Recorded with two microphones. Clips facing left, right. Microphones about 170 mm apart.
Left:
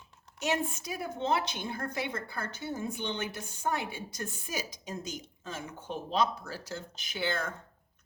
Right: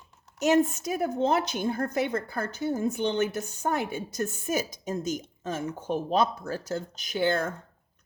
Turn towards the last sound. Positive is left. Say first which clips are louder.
# right 7 dB
turn(degrees=-45)  # may be behind; listen again after turning